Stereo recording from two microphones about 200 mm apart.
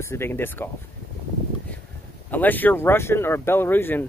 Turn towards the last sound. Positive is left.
turn(degrees=10)  # may be behind; listen again after turning